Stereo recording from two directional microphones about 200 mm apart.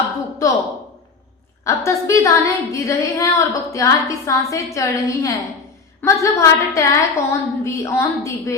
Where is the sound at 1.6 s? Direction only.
15° left (ahead or behind).